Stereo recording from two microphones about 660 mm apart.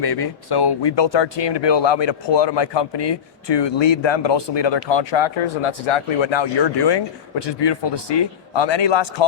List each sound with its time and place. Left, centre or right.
0.0 s speech: left